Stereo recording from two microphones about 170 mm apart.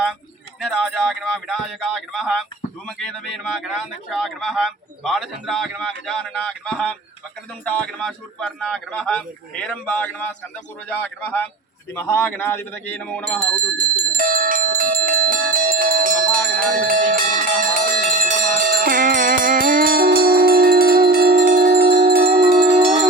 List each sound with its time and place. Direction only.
0.6 s speech: centre (ahead or behind)
14.2 s bell: 55° right (ahead or behind)
22.7 s bell: 35° right (ahead or behind)